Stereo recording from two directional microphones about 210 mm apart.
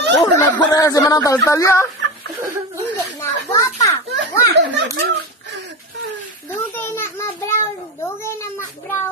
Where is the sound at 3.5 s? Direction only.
15° left (ahead or behind).